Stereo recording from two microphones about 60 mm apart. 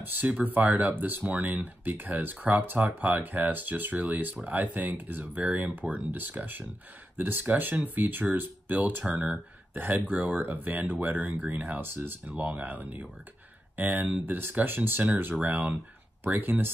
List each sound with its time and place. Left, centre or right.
0.0 s speech: right